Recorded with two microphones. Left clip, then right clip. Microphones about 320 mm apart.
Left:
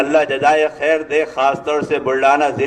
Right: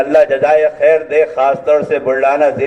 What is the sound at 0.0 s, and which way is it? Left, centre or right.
A man's voice, left.